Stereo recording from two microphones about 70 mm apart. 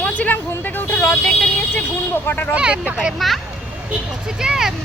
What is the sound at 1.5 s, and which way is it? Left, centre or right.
Speech, left.